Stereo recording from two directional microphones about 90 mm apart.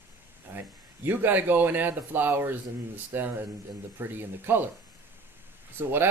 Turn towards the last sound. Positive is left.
turn(degrees=-25)  # may be behind; listen again after turning